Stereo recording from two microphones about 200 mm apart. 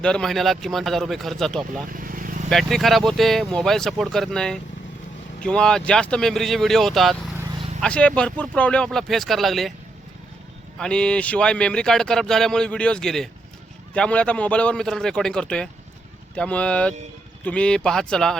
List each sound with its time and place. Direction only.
0.0 s speech: 5° left (ahead or behind)
1.9 s vehicle: 45° right (ahead or behind)
2.5 s speech: centre (ahead or behind)
10.8 s speech: 5° left (ahead or behind)